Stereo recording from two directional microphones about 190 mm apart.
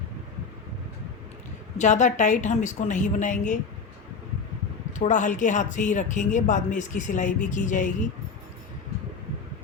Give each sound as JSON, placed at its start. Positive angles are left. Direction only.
{"t": 1.8, "sound": "speech", "side_deg": 40}
{"t": 4.9, "sound": "speech", "side_deg": 40}